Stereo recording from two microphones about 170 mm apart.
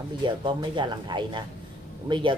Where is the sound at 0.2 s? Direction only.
30° right (ahead or behind).